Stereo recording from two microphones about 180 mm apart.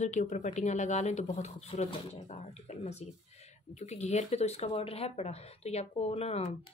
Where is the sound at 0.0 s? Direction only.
40° left (ahead or behind).